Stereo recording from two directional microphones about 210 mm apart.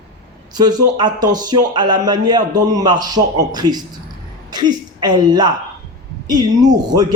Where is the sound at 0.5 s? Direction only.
20° right (ahead or behind).